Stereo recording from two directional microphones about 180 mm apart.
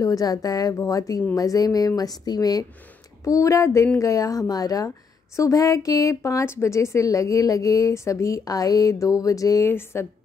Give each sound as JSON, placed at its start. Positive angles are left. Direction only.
{"t": 0.0, "sound": "a woman's voice", "side_deg": 20}